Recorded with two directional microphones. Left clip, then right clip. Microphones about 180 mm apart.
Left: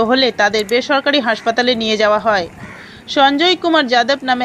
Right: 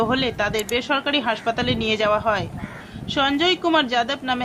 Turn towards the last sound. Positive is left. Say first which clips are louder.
# left 8 dB
turn(degrees=25)  # may be behind; listen again after turning